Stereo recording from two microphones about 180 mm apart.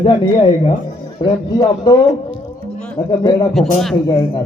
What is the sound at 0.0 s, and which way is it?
A man's voice, 30° left (ahead or behind).